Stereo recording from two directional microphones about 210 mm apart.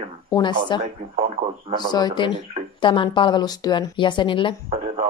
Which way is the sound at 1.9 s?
20° left (ahead or behind).